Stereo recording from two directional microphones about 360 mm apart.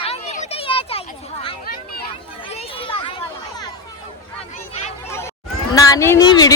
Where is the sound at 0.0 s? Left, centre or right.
Centre.